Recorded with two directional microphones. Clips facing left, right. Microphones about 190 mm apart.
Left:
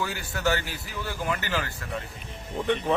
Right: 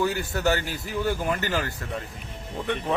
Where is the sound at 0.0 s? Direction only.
45° right (ahead or behind).